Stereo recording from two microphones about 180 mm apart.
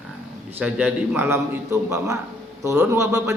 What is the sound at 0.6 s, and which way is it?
Speech, 10° right (ahead or behind).